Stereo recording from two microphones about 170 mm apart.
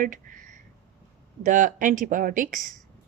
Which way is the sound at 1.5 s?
50° right (ahead or behind).